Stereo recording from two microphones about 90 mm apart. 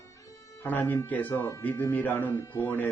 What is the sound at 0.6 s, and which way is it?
Speech, 20° left (ahead or behind).